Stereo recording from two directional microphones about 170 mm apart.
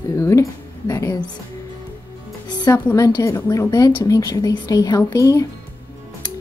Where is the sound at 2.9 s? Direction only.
20° left (ahead or behind).